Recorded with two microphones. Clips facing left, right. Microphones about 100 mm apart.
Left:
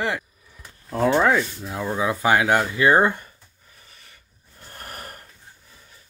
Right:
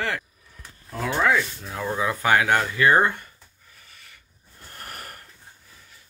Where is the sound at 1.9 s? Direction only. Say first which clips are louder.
Left 1 dB; 20° left (ahead or behind).